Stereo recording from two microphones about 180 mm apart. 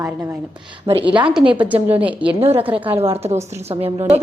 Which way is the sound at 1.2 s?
5° right (ahead or behind).